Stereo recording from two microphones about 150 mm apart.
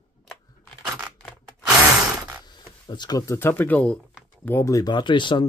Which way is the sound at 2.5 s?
30° left (ahead or behind).